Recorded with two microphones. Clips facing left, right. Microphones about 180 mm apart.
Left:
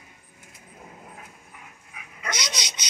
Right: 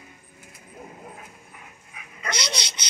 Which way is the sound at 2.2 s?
15° left (ahead or behind).